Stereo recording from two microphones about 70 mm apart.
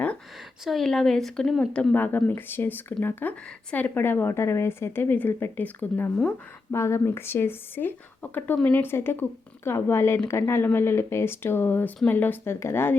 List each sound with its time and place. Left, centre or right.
0.6 s a woman's voice: centre
1.9 s a woman's voice: left
6.7 s a woman's voice: left